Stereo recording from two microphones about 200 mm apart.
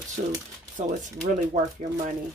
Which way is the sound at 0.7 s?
40° right (ahead or behind).